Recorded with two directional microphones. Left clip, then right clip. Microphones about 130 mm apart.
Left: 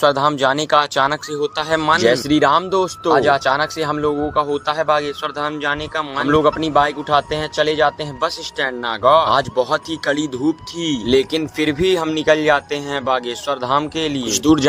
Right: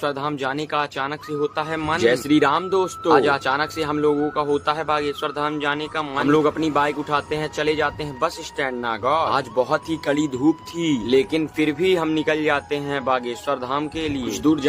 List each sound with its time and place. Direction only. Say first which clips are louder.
0.0 s speech: left 9 dB; 50° left (ahead or behind)
2.0 s speech: left 3 dB; 25° left (ahead or behind)
11.0 s speech: left 4 dB; 45° left (ahead or behind)
14.3 s speech: left 5 dB; 60° left (ahead or behind)